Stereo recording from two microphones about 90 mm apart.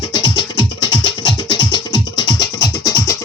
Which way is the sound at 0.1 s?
60° left (ahead or behind).